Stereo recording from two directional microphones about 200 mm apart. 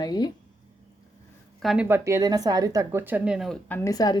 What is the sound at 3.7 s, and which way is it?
Speech, 15° left (ahead or behind).